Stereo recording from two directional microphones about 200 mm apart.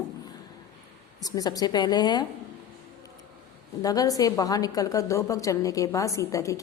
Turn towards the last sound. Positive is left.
turn(degrees=15)  # may be behind; listen again after turning